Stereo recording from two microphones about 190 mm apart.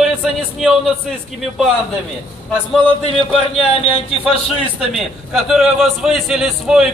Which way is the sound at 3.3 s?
30° left (ahead or behind).